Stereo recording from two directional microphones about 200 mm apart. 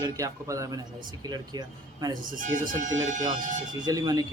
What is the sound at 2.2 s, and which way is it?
Speech, 40° right (ahead or behind).